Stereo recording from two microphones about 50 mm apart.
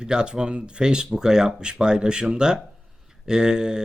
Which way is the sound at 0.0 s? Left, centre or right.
Centre.